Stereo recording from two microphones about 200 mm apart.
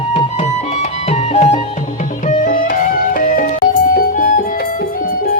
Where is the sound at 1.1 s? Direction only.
30° left (ahead or behind).